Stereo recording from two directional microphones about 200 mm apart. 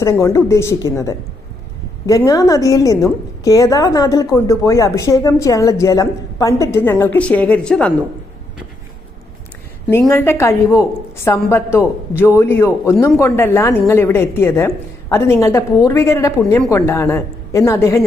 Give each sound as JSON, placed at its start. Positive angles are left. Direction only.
{"t": 0.0, "sound": "a woman's voice", "side_deg": 15}
{"t": 10.1, "sound": "a woman's voice", "side_deg": 15}